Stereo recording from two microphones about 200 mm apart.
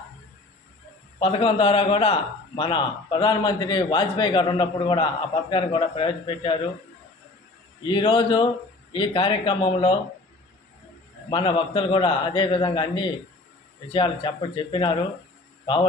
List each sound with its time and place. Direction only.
1.2 s a man's voice: 30° left (ahead or behind)
7.9 s a man's voice: 25° left (ahead or behind)
11.3 s a man's voice: 25° left (ahead or behind)